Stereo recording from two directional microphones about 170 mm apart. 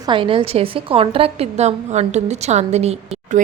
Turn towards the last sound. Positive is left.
turn(degrees=-40)  # may be behind; listen again after turning